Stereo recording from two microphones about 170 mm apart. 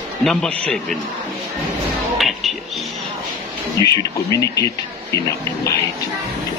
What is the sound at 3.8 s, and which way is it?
Speech, 25° right (ahead or behind).